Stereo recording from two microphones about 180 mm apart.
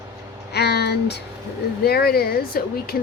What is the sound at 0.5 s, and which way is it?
A woman's voice, 65° left (ahead or behind).